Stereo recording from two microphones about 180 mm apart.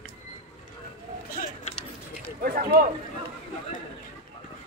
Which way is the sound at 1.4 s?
50° left (ahead or behind).